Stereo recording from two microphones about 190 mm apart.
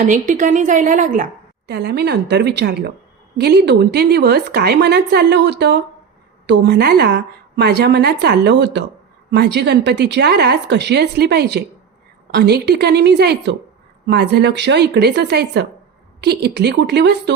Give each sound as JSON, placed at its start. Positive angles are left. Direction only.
{"t": 0.0, "sound": "a woman's voice", "side_deg": -45}
{"t": 1.6, "sound": "a woman's voice", "side_deg": -60}